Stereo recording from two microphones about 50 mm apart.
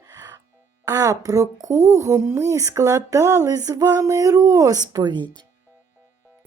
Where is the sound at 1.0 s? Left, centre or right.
Right.